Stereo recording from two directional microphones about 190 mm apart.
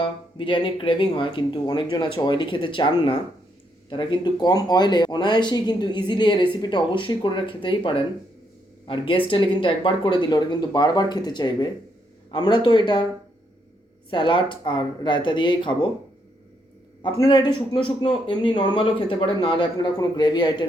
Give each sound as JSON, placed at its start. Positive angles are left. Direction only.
{"t": 0.0, "sound": "speech", "side_deg": 25}
{"t": 14.1, "sound": "speech", "side_deg": 25}
{"t": 17.2, "sound": "speech", "side_deg": 25}